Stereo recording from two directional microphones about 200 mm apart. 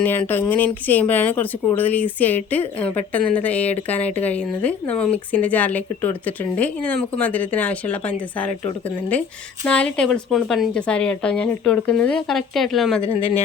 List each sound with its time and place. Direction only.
0.0 s speech: 10° left (ahead or behind)
9.6 s speech: 5° left (ahead or behind)
13.0 s speech: 30° left (ahead or behind)